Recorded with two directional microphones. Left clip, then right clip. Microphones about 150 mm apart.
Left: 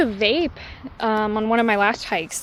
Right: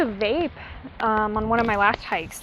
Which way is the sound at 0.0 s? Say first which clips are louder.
Left 3 dB; 90° left.